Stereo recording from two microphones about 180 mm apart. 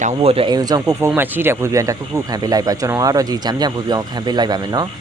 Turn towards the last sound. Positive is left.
turn(degrees=-25)  # may be behind; listen again after turning